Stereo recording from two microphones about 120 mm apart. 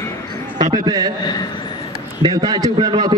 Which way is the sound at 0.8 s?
35° right (ahead or behind).